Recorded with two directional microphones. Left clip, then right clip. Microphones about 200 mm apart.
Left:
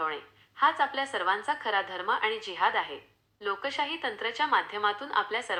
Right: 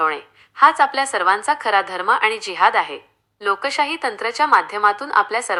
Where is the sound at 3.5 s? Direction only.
30° right (ahead or behind).